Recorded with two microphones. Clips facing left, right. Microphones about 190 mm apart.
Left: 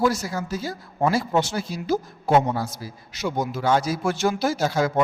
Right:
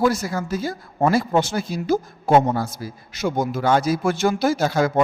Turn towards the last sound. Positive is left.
turn(degrees=-55)  # may be behind; listen again after turning